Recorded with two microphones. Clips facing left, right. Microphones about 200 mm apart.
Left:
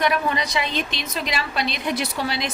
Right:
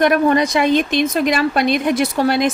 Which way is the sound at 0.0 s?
50° right (ahead or behind).